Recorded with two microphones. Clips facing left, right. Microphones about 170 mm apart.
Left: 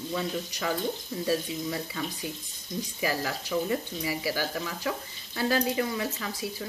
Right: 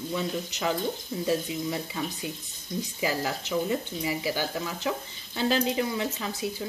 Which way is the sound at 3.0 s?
20° right (ahead or behind).